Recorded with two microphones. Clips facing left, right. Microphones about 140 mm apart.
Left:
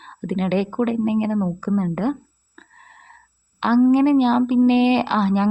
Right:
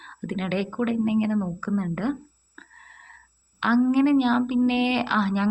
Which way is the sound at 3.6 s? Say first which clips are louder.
Left 5 dB; 30° left (ahead or behind).